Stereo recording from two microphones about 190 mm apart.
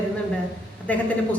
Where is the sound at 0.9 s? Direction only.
10° left (ahead or behind).